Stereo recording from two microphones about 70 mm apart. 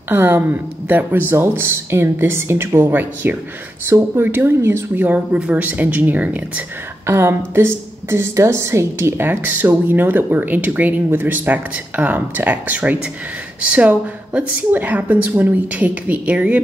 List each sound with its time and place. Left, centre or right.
0.1 s speech: right
3.8 s a woman's voice: right
7.1 s a woman's voice: right; by 16.6 s centre